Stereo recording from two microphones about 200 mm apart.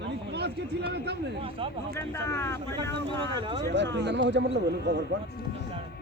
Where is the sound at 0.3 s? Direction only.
55° right (ahead or behind).